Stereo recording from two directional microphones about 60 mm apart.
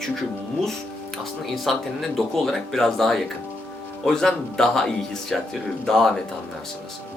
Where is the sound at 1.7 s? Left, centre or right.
Centre.